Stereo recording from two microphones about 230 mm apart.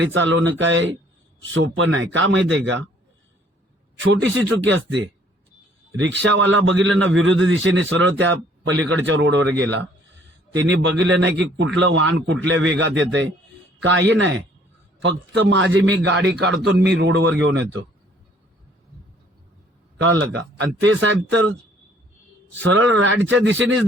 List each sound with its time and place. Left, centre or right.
0.1 s a man's voice: right
4.1 s a man's voice: right
10.5 s a man's voice: right
20.0 s a man's voice: right
22.6 s a man's voice: right